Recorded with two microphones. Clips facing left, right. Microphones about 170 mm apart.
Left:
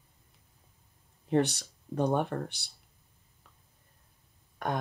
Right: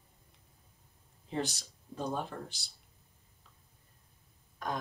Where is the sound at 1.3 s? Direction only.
65° left (ahead or behind).